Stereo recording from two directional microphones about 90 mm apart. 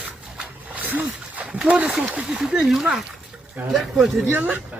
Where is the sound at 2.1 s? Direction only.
10° right (ahead or behind).